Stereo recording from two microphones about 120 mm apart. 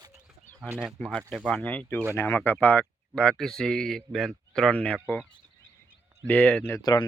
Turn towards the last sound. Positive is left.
turn(degrees=35)  # may be behind; listen again after turning